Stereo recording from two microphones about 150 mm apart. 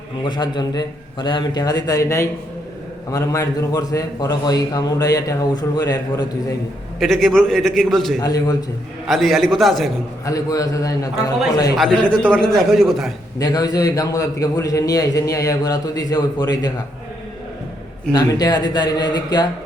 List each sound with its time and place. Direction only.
0.3 s a man's voice: 30° left (ahead or behind)
7.0 s a man's voice: centre (ahead or behind)
8.2 s a man's voice: 25° left (ahead or behind)
9.0 s a man's voice: centre (ahead or behind)
10.2 s a man's voice: 25° left (ahead or behind)
12.3 s a man's voice: 5° left (ahead or behind)
13.4 s a man's voice: 25° left (ahead or behind)
18.1 s a man's voice: 25° left (ahead or behind)